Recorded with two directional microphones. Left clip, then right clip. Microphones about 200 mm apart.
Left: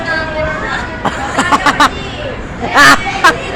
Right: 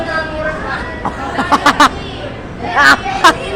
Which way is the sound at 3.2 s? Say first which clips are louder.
Even; 10° right (ahead or behind).